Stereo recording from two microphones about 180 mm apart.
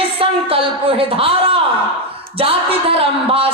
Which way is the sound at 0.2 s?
30° right (ahead or behind).